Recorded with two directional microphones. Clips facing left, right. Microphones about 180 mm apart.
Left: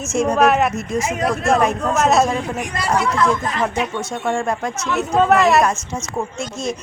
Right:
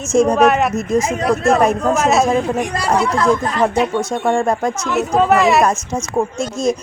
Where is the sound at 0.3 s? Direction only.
Centre (ahead or behind).